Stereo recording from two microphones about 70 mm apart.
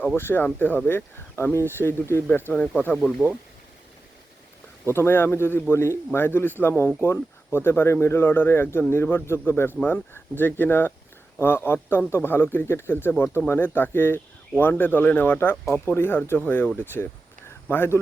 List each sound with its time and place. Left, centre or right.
0.2 s speech: left
2.9 s speech: centre
4.9 s speech: left
17.7 s speech: left